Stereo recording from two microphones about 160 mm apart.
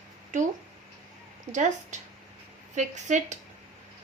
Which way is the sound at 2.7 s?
50° right (ahead or behind).